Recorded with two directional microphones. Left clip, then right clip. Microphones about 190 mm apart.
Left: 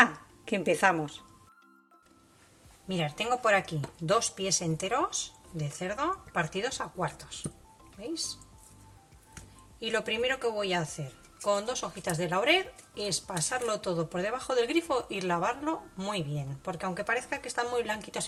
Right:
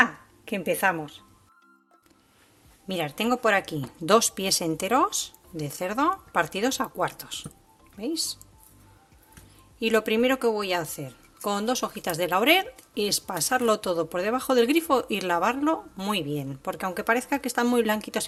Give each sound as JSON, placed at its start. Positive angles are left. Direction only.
{"t": 0.0, "sound": "speech", "side_deg": 0}
{"t": 2.9, "sound": "speech", "side_deg": -45}
{"t": 4.0, "sound": "speech", "side_deg": -55}
{"t": 9.8, "sound": "speech", "side_deg": -55}